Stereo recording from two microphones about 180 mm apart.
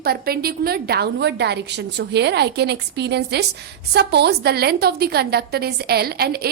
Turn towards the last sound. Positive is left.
turn(degrees=-60)  # may be behind; listen again after turning